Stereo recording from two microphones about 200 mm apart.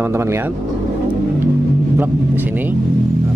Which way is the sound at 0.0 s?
15° right (ahead or behind).